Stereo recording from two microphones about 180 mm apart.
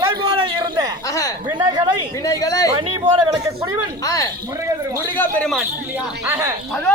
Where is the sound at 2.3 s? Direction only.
20° left (ahead or behind).